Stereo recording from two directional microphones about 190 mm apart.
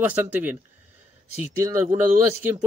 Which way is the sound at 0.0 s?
10° right (ahead or behind).